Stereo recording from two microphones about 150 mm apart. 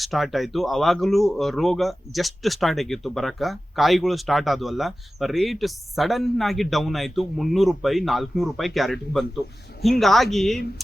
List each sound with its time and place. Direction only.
0.0 s speech: centre (ahead or behind)